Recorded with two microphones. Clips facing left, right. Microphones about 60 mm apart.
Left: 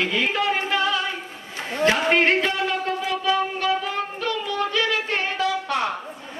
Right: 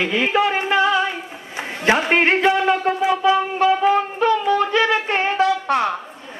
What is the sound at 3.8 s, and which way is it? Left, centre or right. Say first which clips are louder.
Music: right 10 dB; right.